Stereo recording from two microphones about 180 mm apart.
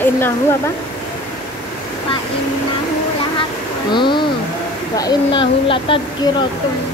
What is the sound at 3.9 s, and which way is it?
Speech, 25° left (ahead or behind).